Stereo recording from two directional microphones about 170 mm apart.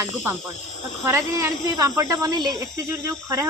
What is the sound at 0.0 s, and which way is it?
Speech, 15° right (ahead or behind).